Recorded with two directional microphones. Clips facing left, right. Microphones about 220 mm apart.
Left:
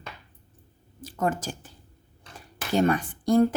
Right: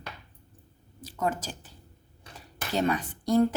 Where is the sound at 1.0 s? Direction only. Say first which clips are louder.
Left 3 dB; 50° left (ahead or behind).